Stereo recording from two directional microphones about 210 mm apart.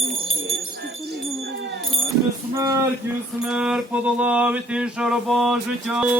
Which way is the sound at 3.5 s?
5° right (ahead or behind).